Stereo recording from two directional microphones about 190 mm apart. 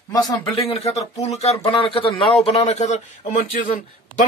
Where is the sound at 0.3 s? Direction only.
30° left (ahead or behind).